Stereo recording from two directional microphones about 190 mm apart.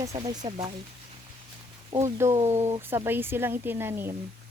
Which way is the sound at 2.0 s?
15° right (ahead or behind).